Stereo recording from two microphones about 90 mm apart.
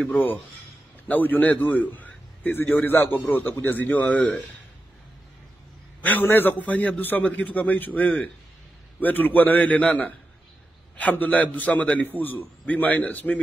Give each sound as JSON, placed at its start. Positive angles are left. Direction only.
{"t": 0.0, "sound": "a man's voice", "side_deg": 20}
{"t": 6.0, "sound": "a man's voice", "side_deg": 20}